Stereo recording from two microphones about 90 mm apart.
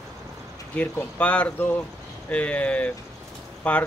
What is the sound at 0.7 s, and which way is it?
Speech, 15° left (ahead or behind).